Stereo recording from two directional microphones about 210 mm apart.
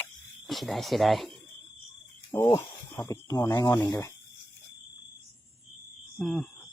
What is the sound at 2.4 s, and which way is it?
Speech, 15° left (ahead or behind).